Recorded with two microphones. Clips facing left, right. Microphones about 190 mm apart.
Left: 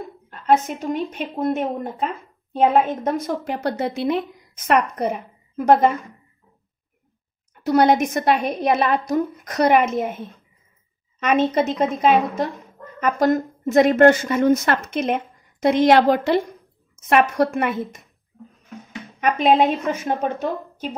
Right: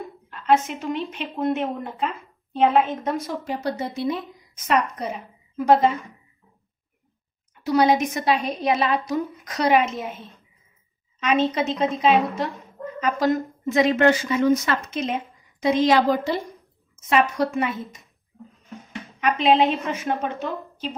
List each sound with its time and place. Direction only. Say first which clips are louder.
0.3 s a woman's voice: left 2 dB; 40° left (ahead or behind)
3.3 s a woman's voice: left 3 dB; 60° left (ahead or behind)
4.6 s a woman's voice: left 4 dB; 55° left (ahead or behind)
7.5 s a woman's voice: left 3 dB; 55° left (ahead or behind)
19.1 s a woman's voice: left 2 dB; 45° left (ahead or behind)